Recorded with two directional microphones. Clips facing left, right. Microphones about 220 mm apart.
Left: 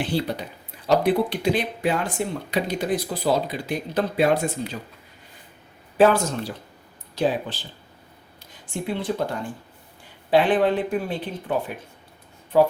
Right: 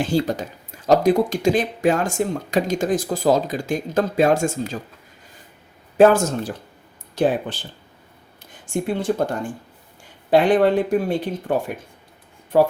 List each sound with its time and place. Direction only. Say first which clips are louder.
0.0 s speech: right 5 dB; 45° right (ahead or behind)
6.0 s speech: right 4 dB; 45° right (ahead or behind)
8.6 s speech: right 5 dB; 45° right (ahead or behind)